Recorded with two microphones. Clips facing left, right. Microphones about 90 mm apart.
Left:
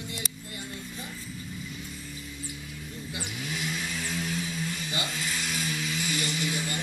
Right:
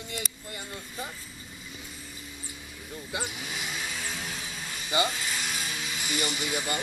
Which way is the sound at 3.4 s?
15° right (ahead or behind).